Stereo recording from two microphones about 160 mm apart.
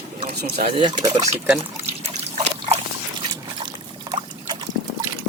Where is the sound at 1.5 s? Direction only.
40° right (ahead or behind).